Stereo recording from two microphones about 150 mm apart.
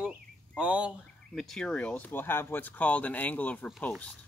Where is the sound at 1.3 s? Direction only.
5° left (ahead or behind).